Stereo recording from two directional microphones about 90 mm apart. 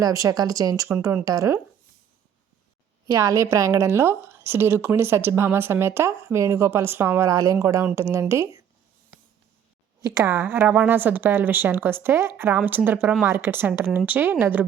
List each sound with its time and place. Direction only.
0.0 s speech: 40° right (ahead or behind)
3.1 s a woman's voice: 35° right (ahead or behind)
10.2 s a woman's voice: 25° right (ahead or behind)